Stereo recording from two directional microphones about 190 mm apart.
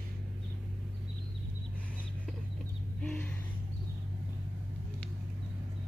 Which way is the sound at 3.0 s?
5° left (ahead or behind).